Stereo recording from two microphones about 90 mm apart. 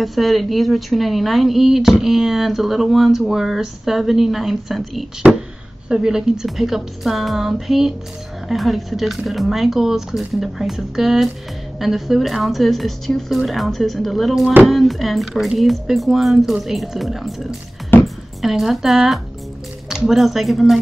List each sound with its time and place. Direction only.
0.0 s speech: centre (ahead or behind)
5.2 s speech: 15° right (ahead or behind); by 20.8 s centre (ahead or behind)